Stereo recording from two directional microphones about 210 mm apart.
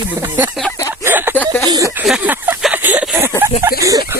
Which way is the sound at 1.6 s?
15° right (ahead or behind).